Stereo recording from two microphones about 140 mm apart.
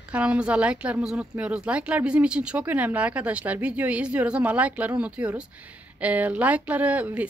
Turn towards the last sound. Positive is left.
turn(degrees=-10)  # may be behind; listen again after turning